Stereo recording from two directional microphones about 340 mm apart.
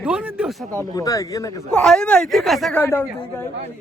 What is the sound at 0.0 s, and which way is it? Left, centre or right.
Speech, centre.